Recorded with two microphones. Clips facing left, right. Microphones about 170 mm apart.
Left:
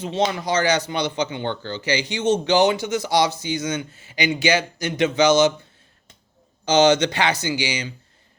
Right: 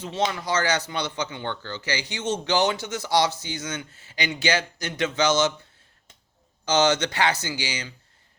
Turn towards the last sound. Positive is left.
turn(degrees=15)  # may be behind; listen again after turning